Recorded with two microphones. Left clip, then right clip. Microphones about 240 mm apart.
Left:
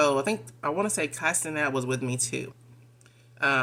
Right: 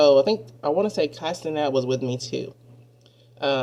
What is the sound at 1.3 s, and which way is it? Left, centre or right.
Speech, left.